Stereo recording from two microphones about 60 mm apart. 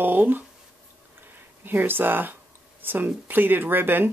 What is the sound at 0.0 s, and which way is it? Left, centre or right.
Speech, right.